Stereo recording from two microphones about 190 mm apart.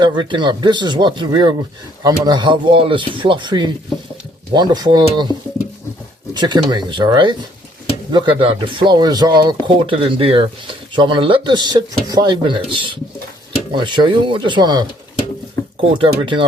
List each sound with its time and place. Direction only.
0.0 s speech: 25° right (ahead or behind)
6.3 s speech: 20° right (ahead or behind)
15.9 s speech: 25° right (ahead or behind)